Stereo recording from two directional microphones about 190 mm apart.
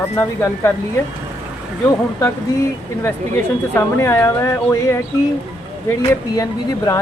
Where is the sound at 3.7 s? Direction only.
10° left (ahead or behind).